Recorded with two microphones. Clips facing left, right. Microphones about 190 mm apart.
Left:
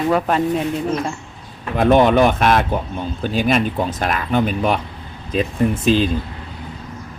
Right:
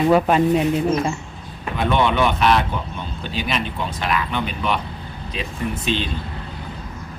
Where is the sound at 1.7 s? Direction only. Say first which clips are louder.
Left 7 dB; 45° left (ahead or behind).